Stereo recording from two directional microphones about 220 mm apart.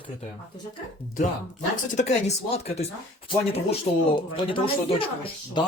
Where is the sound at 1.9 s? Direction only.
30° left (ahead or behind).